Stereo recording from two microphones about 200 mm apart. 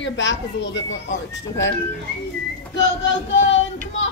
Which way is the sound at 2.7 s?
65° left (ahead or behind).